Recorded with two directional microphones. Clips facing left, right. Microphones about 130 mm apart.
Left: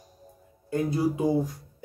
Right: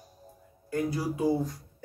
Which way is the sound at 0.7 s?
25° left (ahead or behind).